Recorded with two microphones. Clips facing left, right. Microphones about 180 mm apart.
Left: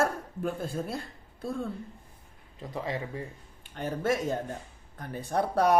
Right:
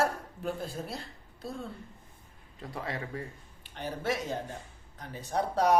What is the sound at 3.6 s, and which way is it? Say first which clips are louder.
A man's voice: left 4 dB; 50° left (ahead or behind).